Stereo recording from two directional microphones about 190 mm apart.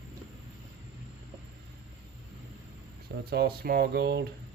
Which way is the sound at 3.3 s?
55° right (ahead or behind).